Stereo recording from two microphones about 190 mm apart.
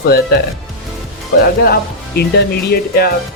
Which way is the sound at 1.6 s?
55° left (ahead or behind).